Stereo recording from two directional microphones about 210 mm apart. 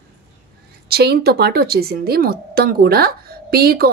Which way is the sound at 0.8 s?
50° right (ahead or behind).